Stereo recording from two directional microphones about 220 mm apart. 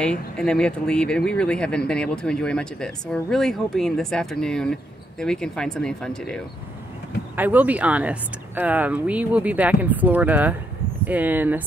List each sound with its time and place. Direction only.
0.0 s speech: 5° left (ahead or behind)
7.3 s speech: 10° right (ahead or behind)